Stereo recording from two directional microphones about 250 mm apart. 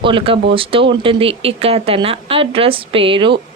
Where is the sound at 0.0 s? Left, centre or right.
Right.